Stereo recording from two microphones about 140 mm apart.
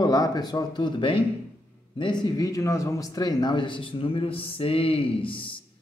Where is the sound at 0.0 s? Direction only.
25° left (ahead or behind).